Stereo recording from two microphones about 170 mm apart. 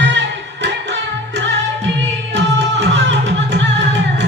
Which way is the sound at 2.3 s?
90° right.